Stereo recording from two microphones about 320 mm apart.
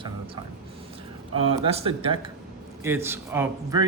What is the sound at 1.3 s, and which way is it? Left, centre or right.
Speech, centre.